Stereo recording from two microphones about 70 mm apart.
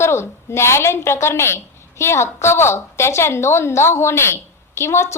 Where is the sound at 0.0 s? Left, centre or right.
Left.